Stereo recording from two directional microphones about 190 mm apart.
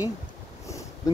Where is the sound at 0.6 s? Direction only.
15° left (ahead or behind).